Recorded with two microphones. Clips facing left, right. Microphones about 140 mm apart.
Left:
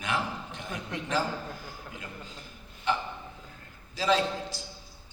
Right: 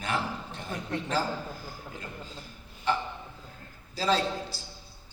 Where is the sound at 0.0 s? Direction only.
35° right (ahead or behind).